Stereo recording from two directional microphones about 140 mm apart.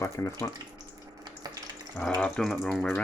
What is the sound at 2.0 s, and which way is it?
Speech, 5° left (ahead or behind).